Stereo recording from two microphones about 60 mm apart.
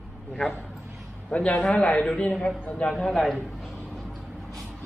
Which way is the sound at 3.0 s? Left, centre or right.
Centre.